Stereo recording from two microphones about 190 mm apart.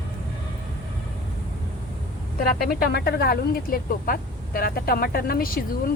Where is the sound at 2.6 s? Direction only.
60° left (ahead or behind).